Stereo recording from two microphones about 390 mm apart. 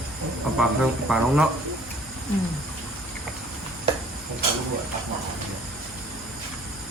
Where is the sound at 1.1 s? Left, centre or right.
Centre.